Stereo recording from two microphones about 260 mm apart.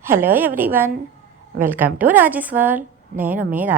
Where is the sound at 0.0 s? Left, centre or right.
Centre.